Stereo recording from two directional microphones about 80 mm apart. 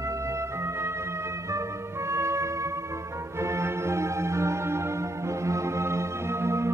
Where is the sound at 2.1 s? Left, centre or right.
Right.